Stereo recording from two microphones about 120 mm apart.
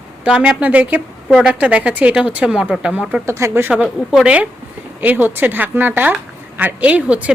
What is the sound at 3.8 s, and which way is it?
A woman's voice, 5° right (ahead or behind).